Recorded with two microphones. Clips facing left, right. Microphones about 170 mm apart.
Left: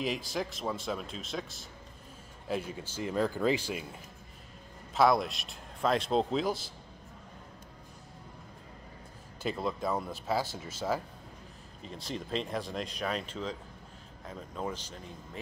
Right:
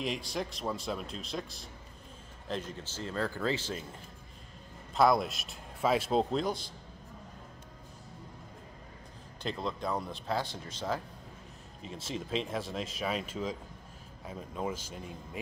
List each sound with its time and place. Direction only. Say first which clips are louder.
0.0 s speech: left 1 dB; centre (ahead or behind)
4.9 s speech: even; centre (ahead or behind)
9.4 s speech: left 2 dB; 5° left (ahead or behind)